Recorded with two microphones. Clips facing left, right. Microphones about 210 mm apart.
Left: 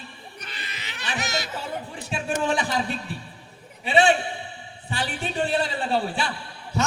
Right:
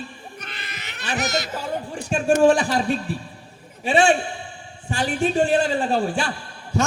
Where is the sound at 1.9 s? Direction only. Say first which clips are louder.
Right 10 dB; 45° right (ahead or behind).